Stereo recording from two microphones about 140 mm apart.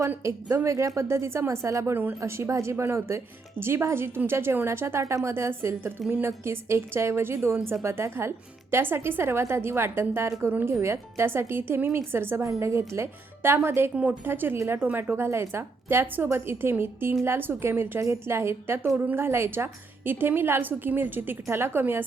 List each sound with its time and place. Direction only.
0.0 s a woman's voice: 20° right (ahead or behind)